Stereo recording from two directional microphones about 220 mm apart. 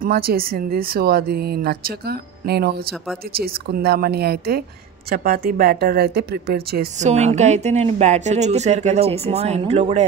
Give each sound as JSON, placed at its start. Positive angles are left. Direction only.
{"t": 0.0, "sound": "speech", "side_deg": -45}
{"t": 7.1, "sound": "speech", "side_deg": -30}